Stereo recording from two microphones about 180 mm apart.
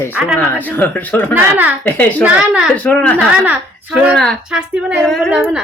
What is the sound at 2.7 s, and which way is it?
Speech, 10° left (ahead or behind).